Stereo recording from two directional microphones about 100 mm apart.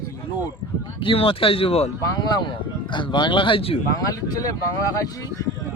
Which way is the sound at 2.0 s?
40° left (ahead or behind).